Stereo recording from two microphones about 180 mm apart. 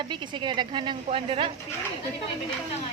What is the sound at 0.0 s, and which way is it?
A woman's voice, 25° right (ahead or behind).